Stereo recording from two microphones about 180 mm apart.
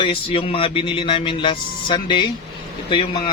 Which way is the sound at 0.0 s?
30° left (ahead or behind).